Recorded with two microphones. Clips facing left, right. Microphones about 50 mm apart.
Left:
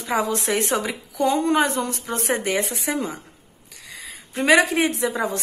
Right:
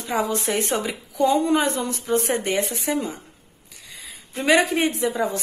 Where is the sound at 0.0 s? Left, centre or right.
Left.